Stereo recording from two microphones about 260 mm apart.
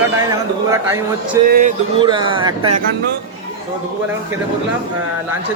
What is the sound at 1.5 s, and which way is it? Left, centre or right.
Speech, right.